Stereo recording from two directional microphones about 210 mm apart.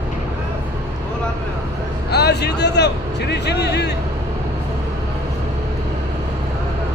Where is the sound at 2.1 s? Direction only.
50° left (ahead or behind).